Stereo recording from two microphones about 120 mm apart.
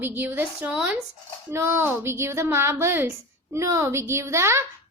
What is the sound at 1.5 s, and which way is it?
A woman's voice, 20° right (ahead or behind).